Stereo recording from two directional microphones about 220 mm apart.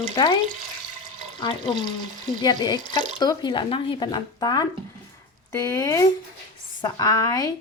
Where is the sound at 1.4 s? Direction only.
20° left (ahead or behind).